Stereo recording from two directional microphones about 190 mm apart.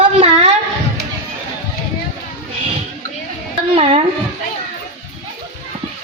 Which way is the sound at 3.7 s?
30° right (ahead or behind).